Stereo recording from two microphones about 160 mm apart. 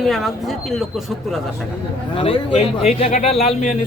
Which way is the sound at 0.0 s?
Centre (ahead or behind).